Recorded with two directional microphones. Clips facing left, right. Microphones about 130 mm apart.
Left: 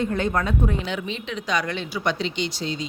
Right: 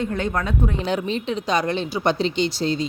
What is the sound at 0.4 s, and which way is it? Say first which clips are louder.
A woman's voice: right 1 dB; 40° right (ahead or behind).